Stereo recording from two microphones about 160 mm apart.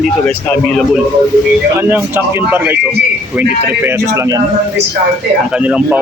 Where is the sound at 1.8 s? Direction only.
15° right (ahead or behind).